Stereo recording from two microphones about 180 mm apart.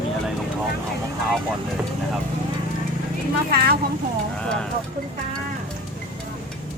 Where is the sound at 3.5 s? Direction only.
60° right (ahead or behind).